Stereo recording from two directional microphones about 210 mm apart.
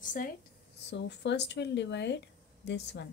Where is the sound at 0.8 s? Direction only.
55° left (ahead or behind).